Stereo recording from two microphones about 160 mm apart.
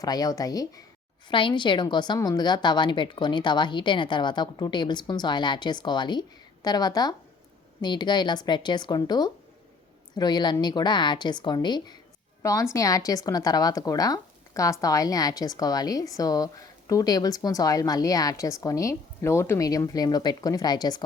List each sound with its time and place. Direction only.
0.0 s speech: 25° left (ahead or behind)